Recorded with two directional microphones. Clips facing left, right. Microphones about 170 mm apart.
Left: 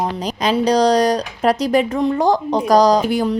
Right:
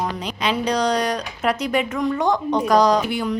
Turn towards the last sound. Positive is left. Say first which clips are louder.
# left 4 dB
turn(degrees=40)  # may be behind; listen again after turning